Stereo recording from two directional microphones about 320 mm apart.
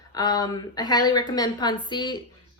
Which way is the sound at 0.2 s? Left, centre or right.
Centre.